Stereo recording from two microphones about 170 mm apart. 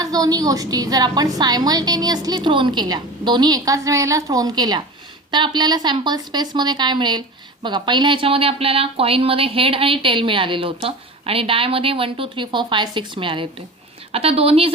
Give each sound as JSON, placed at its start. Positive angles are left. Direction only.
{"t": 0.0, "sound": "a woman's voice", "side_deg": -20}